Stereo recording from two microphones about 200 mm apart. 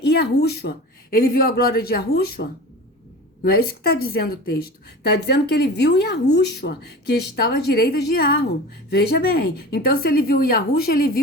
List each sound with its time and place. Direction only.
0.0 s a woman's voice: 55° left (ahead or behind)